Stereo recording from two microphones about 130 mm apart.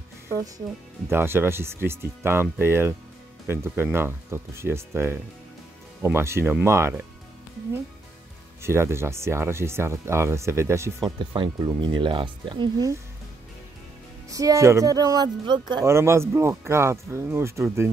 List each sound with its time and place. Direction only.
1.1 s speech: 20° right (ahead or behind)
8.6 s speech: 20° right (ahead or behind)
11.1 s speech: 40° right (ahead or behind)
14.3 s speech: 25° right (ahead or behind)
15.8 s speech: 20° right (ahead or behind)